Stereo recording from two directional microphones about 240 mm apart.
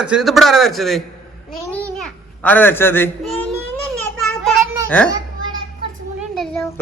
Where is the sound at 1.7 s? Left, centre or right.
Centre.